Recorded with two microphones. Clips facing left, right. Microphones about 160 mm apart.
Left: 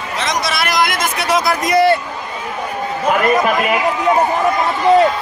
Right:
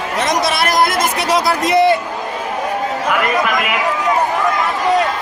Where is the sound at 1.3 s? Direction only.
30° right (ahead or behind).